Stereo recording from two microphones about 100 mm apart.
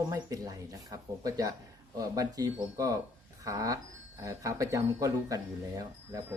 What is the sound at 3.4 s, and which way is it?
Alarm clock, 35° right (ahead or behind).